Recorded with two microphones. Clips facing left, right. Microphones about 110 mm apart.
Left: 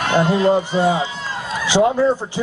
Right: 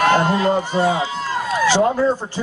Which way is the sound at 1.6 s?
15° left (ahead or behind).